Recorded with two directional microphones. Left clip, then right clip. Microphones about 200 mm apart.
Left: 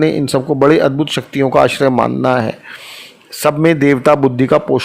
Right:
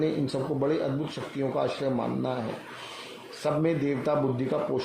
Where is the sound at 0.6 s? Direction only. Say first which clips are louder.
Left 19 dB; 45° left (ahead or behind).